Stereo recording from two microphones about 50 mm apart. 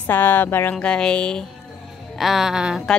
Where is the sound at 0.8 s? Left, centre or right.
Centre.